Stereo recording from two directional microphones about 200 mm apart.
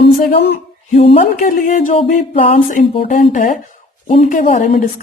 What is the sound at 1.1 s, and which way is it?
A woman's voice, 40° left (ahead or behind).